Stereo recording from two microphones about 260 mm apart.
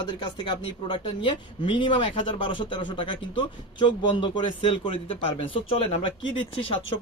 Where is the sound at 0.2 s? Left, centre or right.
Centre.